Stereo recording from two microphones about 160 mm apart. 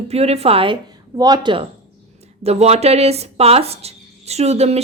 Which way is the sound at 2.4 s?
40° right (ahead or behind).